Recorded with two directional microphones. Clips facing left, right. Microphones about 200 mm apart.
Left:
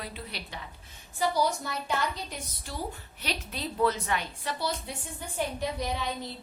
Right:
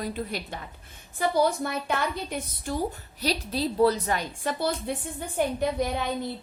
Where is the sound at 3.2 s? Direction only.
35° right (ahead or behind).